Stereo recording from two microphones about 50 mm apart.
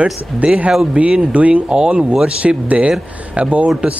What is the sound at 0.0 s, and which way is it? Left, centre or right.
Speech, right.